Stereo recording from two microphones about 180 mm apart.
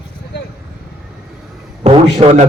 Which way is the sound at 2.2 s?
30° right (ahead or behind).